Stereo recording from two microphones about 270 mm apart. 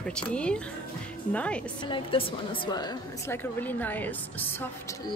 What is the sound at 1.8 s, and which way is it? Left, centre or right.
A woman's voice, centre.